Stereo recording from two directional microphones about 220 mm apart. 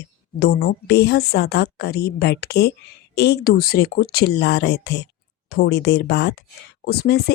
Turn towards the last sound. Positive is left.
turn(degrees=45)  # may be behind; listen again after turning